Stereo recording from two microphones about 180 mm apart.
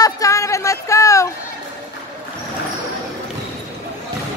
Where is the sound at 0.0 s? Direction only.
15° left (ahead or behind).